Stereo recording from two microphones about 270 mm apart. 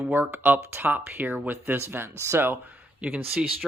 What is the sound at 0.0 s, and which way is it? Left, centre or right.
Speech, centre.